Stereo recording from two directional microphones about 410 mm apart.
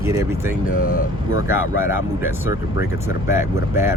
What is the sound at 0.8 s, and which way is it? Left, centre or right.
Speech, left.